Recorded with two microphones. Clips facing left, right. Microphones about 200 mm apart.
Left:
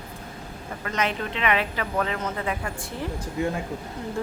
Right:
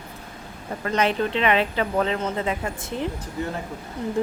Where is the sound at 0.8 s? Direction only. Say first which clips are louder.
Right 5 dB; 30° right (ahead or behind).